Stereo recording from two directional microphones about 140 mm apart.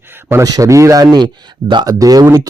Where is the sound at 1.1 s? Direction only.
35° right (ahead or behind).